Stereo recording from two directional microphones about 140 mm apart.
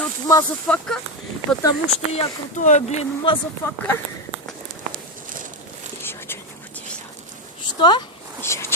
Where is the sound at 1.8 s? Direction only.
50° left (ahead or behind).